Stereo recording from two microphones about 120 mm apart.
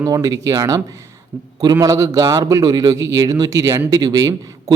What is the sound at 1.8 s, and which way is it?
Speech, 30° right (ahead or behind).